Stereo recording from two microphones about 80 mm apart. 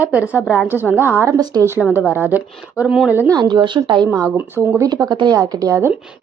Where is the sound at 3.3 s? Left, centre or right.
Right.